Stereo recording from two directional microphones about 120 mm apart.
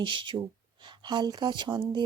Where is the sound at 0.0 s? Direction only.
40° right (ahead or behind).